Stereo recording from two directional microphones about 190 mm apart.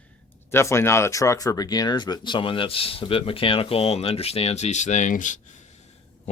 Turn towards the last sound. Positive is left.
turn(degrees=40)  # may be behind; listen again after turning